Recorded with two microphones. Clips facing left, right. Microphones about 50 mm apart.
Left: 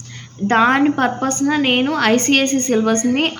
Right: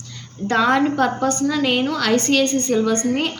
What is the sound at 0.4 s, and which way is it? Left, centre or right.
A woman's voice, left.